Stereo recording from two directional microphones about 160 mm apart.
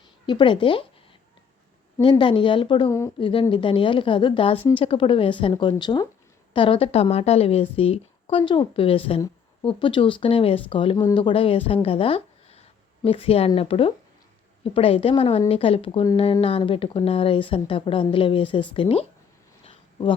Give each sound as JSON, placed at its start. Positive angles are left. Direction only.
{"t": 0.3, "sound": "speech", "side_deg": 30}
{"t": 2.0, "sound": "speech", "side_deg": 30}
{"t": 19.6, "sound": "a sound", "side_deg": 30}